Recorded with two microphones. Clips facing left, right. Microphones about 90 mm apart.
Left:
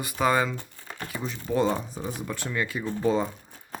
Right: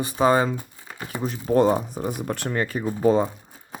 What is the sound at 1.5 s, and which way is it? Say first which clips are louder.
Speech: right 6 dB; 45° right (ahead or behind).